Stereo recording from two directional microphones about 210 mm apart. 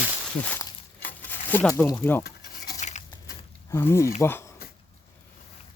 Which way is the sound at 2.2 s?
50° left (ahead or behind).